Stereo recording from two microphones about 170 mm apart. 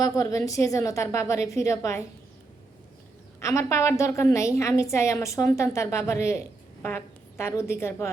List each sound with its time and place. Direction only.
0.0 s a woman's voice: 20° left (ahead or behind)
3.4 s a woman's voice: 15° left (ahead or behind)